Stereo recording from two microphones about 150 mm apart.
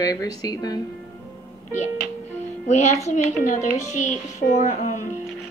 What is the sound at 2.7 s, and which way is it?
Speech, 50° left (ahead or behind).